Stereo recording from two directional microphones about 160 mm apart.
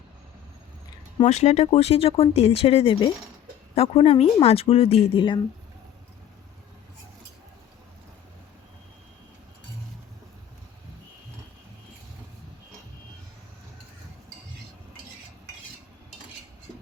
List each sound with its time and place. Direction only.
1.2 s speech: 45° left (ahead or behind)